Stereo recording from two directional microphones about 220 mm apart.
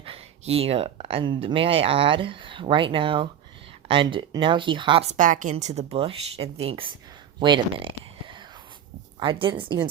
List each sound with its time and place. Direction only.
0.0 s speech: 25° right (ahead or behind)